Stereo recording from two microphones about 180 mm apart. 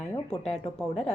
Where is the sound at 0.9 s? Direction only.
40° left (ahead or behind).